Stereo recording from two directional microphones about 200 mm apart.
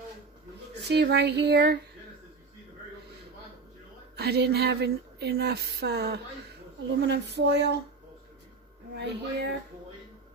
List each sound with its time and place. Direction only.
0.8 s speech: 55° right (ahead or behind)
4.2 s speech: 55° right (ahead or behind)
8.9 s speech: 60° right (ahead or behind)